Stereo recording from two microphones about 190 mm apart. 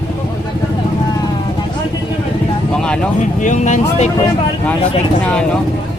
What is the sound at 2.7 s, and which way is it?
Vehicle, 5° left (ahead or behind).